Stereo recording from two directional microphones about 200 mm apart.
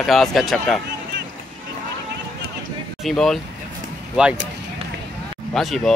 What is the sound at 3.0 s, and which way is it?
Speech, centre (ahead or behind).